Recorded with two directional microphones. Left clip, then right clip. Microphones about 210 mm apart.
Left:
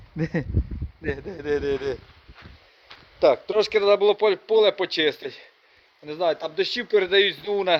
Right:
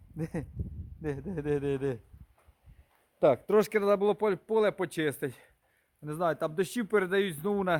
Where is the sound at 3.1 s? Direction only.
25° right (ahead or behind).